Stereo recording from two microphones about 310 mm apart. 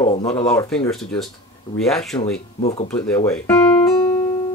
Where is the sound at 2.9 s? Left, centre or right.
Centre.